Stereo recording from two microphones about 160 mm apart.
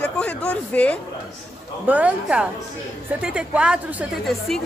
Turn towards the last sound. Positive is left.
turn(degrees=0)  # may be behind; listen again after turning